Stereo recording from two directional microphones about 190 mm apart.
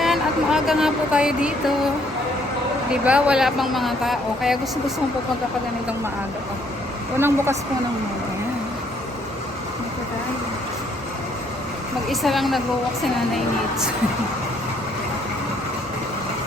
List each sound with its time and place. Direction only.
0.0 s speech: centre (ahead or behind)
2.9 s speech: 5° right (ahead or behind)
7.2 s a woman's voice: 10° right (ahead or behind)
12.0 s speech: centre (ahead or behind)